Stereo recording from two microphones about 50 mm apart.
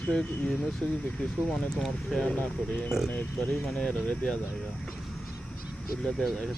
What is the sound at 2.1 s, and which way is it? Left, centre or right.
Speech, left.